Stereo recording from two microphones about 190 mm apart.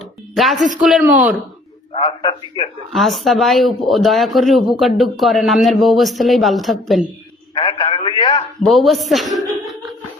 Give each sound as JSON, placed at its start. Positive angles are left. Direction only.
{"t": 0.3, "sound": "speech", "side_deg": 0}
{"t": 1.9, "sound": "a man's voice", "side_deg": 30}
{"t": 2.9, "sound": "speech", "side_deg": 0}
{"t": 7.5, "sound": "a sound", "side_deg": 25}
{"t": 8.6, "sound": "a woman's voice", "side_deg": 0}